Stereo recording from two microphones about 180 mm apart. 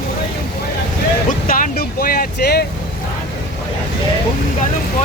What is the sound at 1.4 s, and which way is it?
Vehicle, 50° left (ahead or behind).